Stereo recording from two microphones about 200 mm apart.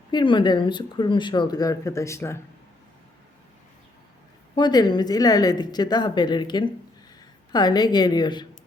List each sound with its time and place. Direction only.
0.1 s speech: 20° left (ahead or behind)
4.5 s speech: 20° left (ahead or behind)